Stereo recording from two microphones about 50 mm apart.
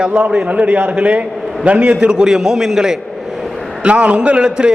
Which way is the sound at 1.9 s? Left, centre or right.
Centre.